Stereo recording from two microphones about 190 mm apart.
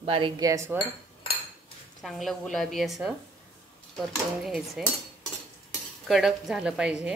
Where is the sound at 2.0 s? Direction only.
Centre (ahead or behind).